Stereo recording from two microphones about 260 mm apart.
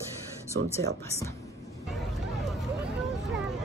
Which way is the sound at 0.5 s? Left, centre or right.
Right.